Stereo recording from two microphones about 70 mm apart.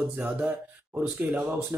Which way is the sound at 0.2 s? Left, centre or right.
Right.